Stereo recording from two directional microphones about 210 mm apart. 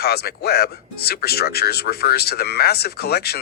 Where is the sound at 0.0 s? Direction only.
50° left (ahead or behind).